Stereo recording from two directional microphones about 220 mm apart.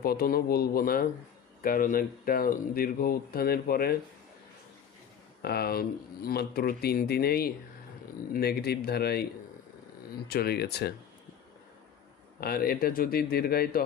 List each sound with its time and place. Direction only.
0.0 s speech: 45° left (ahead or behind)
5.4 s speech: 45° left (ahead or behind)
12.4 s speech: 45° left (ahead or behind)